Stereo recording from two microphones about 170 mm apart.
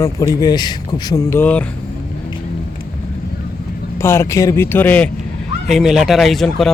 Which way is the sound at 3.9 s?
15° left (ahead or behind).